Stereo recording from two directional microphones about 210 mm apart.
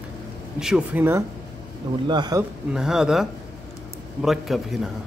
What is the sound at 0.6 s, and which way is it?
Speech, 5° right (ahead or behind).